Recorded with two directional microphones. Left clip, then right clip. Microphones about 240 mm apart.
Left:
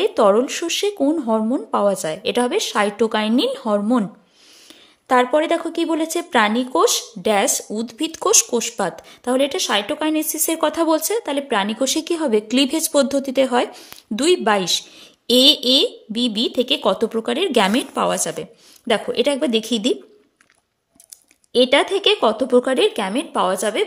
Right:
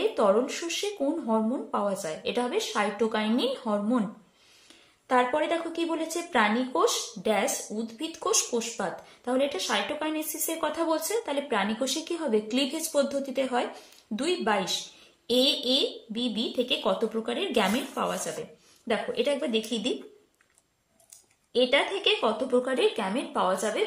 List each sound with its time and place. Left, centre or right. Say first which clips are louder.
0.0 s a woman's voice: left 8 dB; left
5.0 s a woman's voice: left 8 dB; left
21.5 s a woman's voice: left 9 dB; left